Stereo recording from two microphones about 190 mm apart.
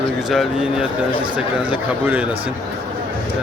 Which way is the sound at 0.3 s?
Centre (ahead or behind).